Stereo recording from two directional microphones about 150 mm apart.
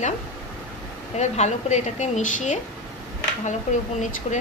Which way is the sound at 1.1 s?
50° left (ahead or behind).